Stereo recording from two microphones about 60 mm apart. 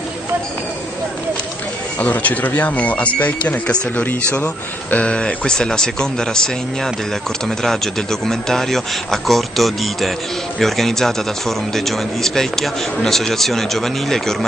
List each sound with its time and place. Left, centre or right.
2.0 s speech: left
4.9 s a man's voice: centre